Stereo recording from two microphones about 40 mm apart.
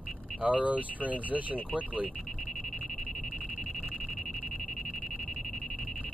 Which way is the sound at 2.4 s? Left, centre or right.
Centre.